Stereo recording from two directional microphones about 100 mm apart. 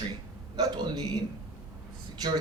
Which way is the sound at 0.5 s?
45° right (ahead or behind).